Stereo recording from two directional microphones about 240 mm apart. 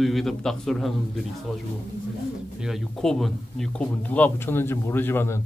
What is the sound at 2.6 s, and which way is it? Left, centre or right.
Speech, centre.